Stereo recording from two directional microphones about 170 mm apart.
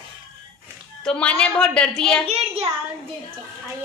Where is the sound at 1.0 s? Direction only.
5° left (ahead or behind).